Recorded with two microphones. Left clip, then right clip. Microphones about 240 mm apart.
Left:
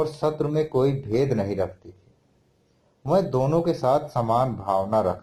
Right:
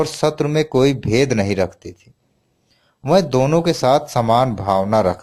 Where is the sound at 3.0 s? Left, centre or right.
Right.